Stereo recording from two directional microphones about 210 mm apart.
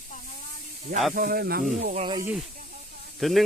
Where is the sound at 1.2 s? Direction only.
45° right (ahead or behind).